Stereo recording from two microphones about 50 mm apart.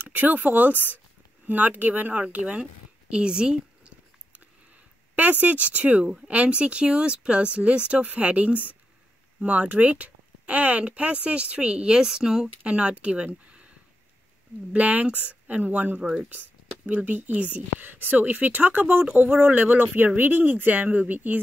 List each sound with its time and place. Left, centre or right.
0.0 s speech: right
2.6 s a sound: centre
5.1 s speech: right; by 12.4 s centre
12.6 s speech: right
16.0 s speech: centre
16.3 s speech: right